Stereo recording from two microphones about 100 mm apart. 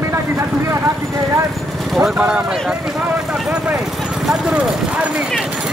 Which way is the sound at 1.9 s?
5° right (ahead or behind).